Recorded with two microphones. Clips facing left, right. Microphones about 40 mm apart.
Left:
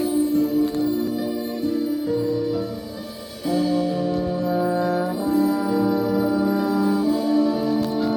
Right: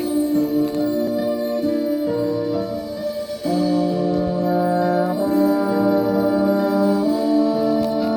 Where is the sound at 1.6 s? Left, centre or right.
Centre.